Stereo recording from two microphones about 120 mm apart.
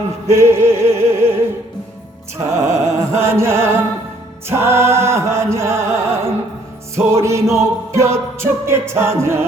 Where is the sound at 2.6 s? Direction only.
65° right (ahead or behind).